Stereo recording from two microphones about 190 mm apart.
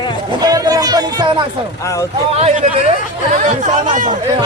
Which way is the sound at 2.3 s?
35° right (ahead or behind).